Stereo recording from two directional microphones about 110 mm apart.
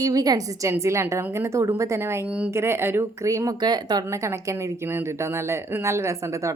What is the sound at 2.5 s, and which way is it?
A woman's voice, 20° right (ahead or behind).